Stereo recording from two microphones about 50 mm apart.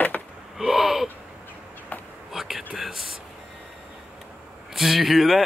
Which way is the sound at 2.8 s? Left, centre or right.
Centre.